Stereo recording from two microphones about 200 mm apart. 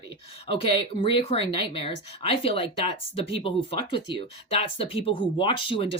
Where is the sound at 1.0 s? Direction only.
25° left (ahead or behind).